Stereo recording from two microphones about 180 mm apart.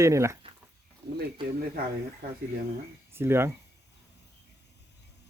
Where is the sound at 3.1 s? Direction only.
15° right (ahead or behind).